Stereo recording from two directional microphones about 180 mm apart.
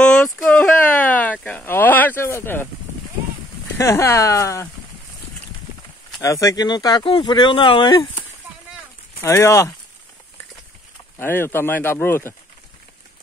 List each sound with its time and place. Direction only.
0.0 s a sound: 5° left (ahead or behind)
3.7 s speech: 15° left (ahead or behind)
6.2 s speech: 20° left (ahead or behind)
9.2 s speech: 15° left (ahead or behind)
11.1 s speech: 10° left (ahead or behind)